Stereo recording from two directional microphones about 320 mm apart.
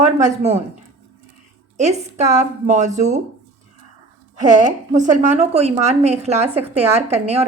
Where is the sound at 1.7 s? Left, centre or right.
Right.